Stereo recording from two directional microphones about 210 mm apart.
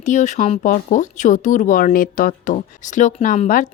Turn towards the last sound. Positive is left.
turn(degrees=35)  # may be behind; listen again after turning